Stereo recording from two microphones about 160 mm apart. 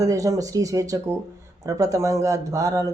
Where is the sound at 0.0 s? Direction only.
20° right (ahead or behind).